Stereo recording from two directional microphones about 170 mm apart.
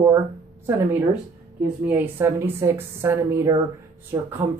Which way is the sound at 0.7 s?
15° right (ahead or behind).